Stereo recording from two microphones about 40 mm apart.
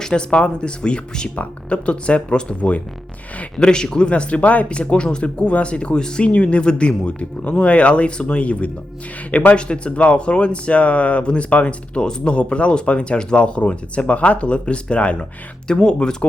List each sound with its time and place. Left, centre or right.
0.0 s speech: left
3.6 s speech: left